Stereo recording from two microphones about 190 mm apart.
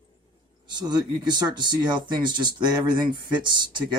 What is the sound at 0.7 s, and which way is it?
Speech, 20° right (ahead or behind).